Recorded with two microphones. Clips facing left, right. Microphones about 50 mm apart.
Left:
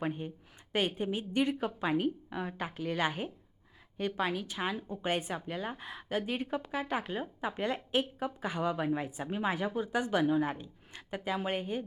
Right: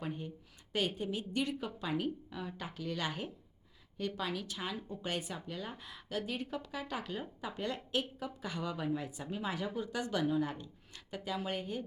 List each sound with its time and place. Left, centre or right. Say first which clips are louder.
0.0 s a woman's voice: left 5 dB; left